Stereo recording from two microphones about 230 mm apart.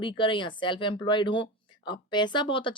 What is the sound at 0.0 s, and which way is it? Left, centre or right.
Speech, left.